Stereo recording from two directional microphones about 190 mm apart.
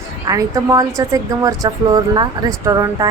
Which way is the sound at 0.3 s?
15° right (ahead or behind).